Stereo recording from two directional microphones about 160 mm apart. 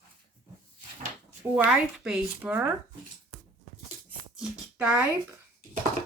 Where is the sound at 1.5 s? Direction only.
5° right (ahead or behind).